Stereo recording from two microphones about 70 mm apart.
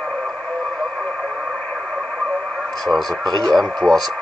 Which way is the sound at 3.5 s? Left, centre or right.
Centre.